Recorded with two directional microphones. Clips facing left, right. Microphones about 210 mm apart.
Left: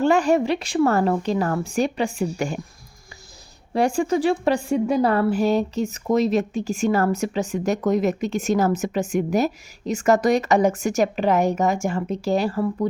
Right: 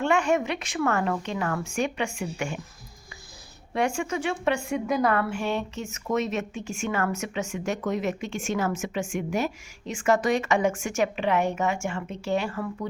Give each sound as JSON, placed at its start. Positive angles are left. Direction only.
{"t": 0.0, "sound": "a woman's voice", "side_deg": 35}
{"t": 3.7, "sound": "a woman's voice", "side_deg": 35}